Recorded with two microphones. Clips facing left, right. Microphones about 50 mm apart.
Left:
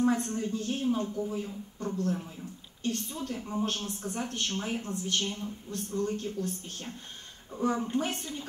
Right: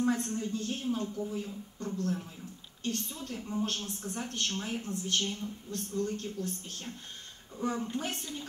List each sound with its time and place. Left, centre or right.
0.0 s a woman's voice: left